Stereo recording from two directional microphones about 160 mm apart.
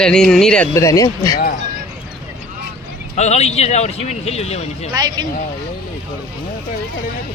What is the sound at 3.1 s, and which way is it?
A man's voice, 45° left (ahead or behind).